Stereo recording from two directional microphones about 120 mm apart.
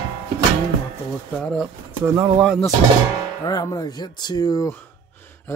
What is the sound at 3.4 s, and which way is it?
Speech, 30° left (ahead or behind).